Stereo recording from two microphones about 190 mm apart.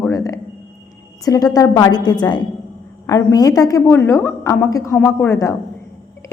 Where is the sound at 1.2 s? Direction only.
20° left (ahead or behind).